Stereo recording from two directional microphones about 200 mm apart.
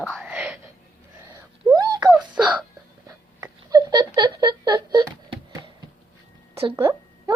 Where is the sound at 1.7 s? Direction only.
20° right (ahead or behind).